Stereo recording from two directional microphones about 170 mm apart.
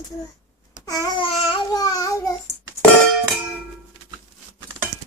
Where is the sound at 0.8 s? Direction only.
20° left (ahead or behind).